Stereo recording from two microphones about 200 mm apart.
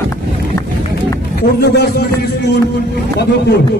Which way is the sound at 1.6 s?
55° left (ahead or behind).